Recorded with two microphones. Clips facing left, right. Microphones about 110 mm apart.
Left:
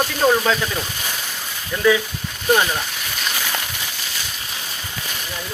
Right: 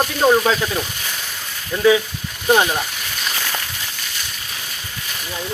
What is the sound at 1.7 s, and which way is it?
Speech, 20° right (ahead or behind).